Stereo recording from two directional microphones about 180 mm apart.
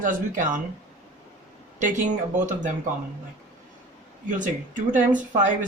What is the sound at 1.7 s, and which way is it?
Speech, 45° right (ahead or behind).